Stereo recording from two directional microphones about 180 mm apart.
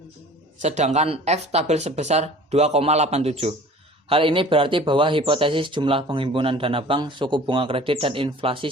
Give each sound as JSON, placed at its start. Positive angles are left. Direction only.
{"t": 0.6, "sound": "speech", "side_deg": -40}